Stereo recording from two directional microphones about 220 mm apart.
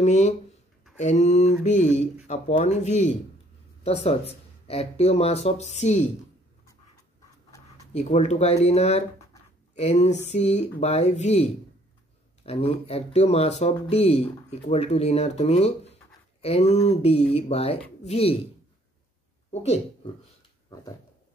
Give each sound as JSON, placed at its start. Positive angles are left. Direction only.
{"t": 0.0, "sound": "mantra", "side_deg": 30}
{"t": 3.8, "sound": "speech", "side_deg": 30}
{"t": 7.5, "sound": "a sound", "side_deg": 15}
{"t": 7.9, "sound": "speech", "side_deg": 30}
{"t": 12.4, "sound": "speech", "side_deg": 25}
{"t": 19.5, "sound": "speech", "side_deg": 30}